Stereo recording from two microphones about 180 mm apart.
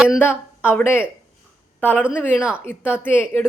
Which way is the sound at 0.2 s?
10° left (ahead or behind).